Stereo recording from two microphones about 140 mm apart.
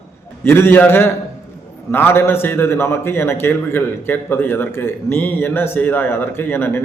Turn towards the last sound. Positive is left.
turn(degrees=15)  # may be behind; listen again after turning